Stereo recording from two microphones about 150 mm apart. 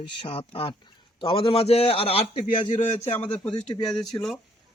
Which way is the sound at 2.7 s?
55° left (ahead or behind).